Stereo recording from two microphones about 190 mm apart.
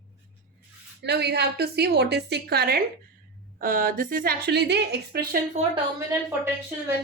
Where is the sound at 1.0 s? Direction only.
60° right (ahead or behind).